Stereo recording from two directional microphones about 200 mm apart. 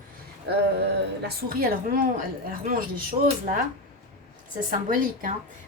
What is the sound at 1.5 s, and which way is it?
Speech, 45° right (ahead or behind).